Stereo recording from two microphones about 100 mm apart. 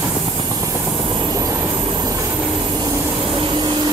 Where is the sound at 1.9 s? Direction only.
40° right (ahead or behind).